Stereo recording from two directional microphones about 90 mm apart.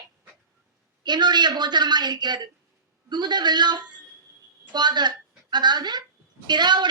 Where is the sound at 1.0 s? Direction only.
55° right (ahead or behind).